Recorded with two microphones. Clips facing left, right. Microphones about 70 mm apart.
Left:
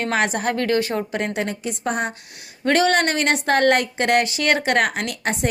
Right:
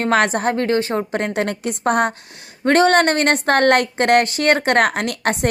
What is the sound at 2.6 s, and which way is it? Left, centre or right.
Speech, right.